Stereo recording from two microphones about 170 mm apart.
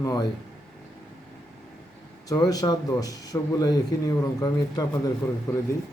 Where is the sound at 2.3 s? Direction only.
25° left (ahead or behind).